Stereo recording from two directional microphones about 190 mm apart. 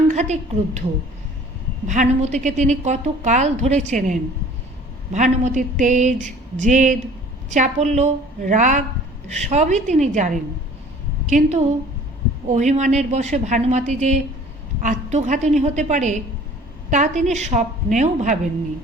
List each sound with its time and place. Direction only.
0.1 s a woman's voice: 35° right (ahead or behind)
1.9 s a woman's voice: 40° right (ahead or behind)